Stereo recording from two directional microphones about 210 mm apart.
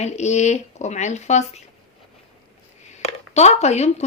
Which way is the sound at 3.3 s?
30° left (ahead or behind).